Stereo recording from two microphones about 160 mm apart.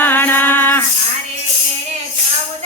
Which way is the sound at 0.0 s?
10° left (ahead or behind).